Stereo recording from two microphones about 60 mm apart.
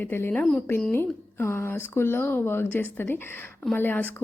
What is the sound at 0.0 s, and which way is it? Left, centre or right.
Speech, left.